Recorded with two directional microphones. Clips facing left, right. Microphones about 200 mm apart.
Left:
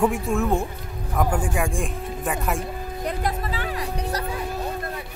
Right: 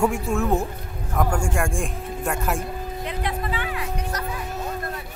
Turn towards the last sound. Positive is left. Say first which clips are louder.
# left 1 dB
turn(degrees=35)  # may be behind; listen again after turning